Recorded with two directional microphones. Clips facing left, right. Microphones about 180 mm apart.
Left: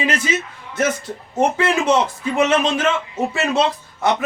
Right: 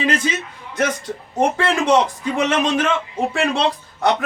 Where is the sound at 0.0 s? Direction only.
5° left (ahead or behind).